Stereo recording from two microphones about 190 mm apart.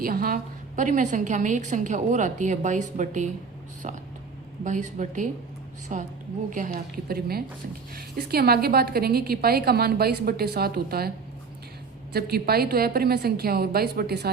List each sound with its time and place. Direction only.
0.0 s a woman's voice: 50° right (ahead or behind)
12.1 s a woman's voice: 55° right (ahead or behind)